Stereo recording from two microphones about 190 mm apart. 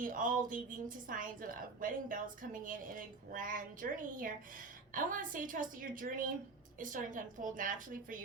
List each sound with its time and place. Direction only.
0.0 s a woman's voice: 45° right (ahead or behind)